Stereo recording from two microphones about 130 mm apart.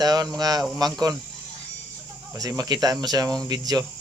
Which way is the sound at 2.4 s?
30° right (ahead or behind).